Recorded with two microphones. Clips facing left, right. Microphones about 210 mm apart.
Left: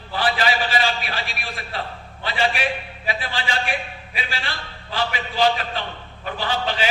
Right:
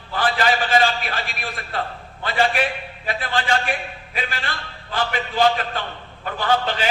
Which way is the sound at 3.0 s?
50° right (ahead or behind).